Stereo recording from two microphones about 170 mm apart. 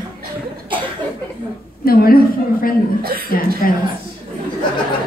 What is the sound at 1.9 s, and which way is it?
A woman's voice, 60° left (ahead or behind).